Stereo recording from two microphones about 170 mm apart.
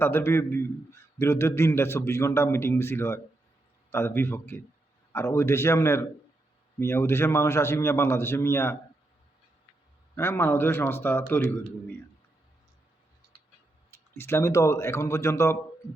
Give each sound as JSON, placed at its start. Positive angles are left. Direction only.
{"t": 0.0, "sound": "a man's voice", "side_deg": 15}
{"t": 10.2, "sound": "a man's voice", "side_deg": 15}
{"t": 13.9, "sound": "a man's voice", "side_deg": 15}